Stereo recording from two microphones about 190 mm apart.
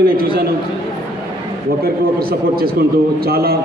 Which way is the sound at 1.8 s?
55° right (ahead or behind).